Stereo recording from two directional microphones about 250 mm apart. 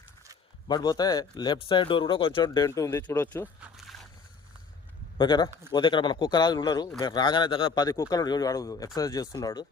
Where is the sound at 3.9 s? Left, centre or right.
Centre.